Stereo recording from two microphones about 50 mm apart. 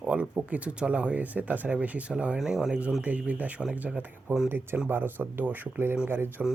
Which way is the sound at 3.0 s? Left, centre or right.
Right.